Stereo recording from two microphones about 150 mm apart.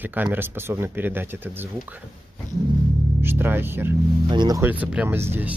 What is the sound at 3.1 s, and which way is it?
Speech, 15° right (ahead or behind).